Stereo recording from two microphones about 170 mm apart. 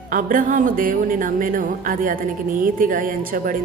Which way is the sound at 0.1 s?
55° right (ahead or behind).